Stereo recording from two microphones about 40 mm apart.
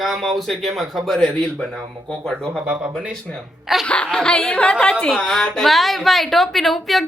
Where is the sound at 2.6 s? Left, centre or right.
Right.